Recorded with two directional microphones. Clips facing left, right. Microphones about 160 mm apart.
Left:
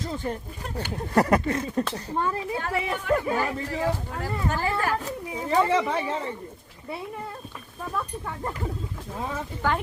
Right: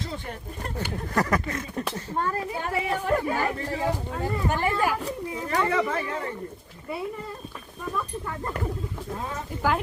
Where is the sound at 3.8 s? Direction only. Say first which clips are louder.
Left 1 dB; 20° right (ahead or behind).